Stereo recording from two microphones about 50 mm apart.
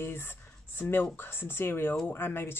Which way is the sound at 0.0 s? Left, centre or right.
Left.